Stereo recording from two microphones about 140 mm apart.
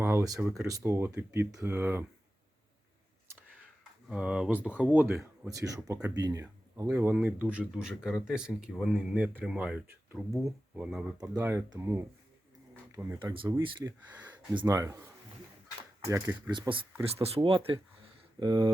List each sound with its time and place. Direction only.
0.0 s a sound: 20° right (ahead or behind)
0.7 s speech: 20° right (ahead or behind)
4.1 s speech: 5° right (ahead or behind)
5.5 s speech: 25° right (ahead or behind)
6.9 s speech: 15° right (ahead or behind)
11.2 s speech: 20° right (ahead or behind)
13.1 s speech: 35° right (ahead or behind); by 16.4 s 20° right (ahead or behind)
16.5 s speech: 35° right (ahead or behind)